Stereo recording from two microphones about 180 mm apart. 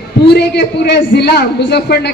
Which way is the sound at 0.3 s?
70° left (ahead or behind).